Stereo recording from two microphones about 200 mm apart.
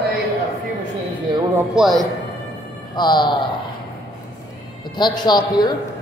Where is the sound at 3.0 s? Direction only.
20° left (ahead or behind).